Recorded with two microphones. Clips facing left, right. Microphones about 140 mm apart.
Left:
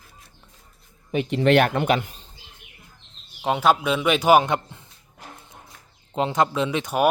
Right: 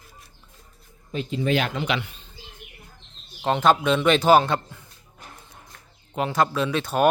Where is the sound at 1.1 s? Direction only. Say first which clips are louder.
Left 6 dB; 70° left (ahead or behind); by 2.2 s 40° left (ahead or behind).